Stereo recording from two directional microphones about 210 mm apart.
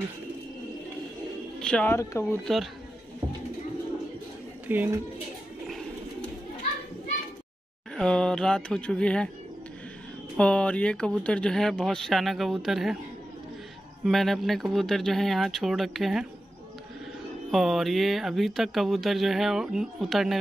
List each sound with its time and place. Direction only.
1.6 s speech: 5° left (ahead or behind)
2.4 s speech: centre (ahead or behind)
4.6 s speech: 10° right (ahead or behind)
7.9 s speech: 5° left (ahead or behind)
10.3 s speech: 5° left (ahead or behind)
14.0 s speech: centre (ahead or behind)
17.5 s speech: centre (ahead or behind)